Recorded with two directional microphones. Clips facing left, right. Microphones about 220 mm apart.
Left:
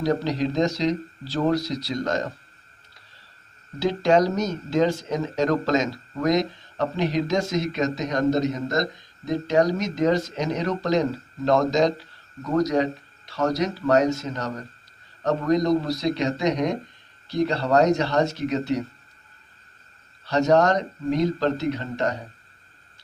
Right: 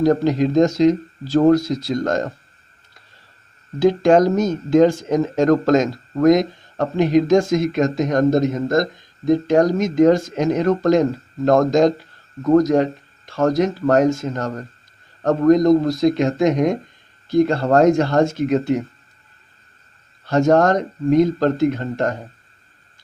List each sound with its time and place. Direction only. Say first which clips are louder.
0.0 s speech: right 7 dB; 50° right (ahead or behind)
3.8 s speech: right 6 dB; 50° right (ahead or behind)
20.2 s speech: right 4 dB; 50° right (ahead or behind)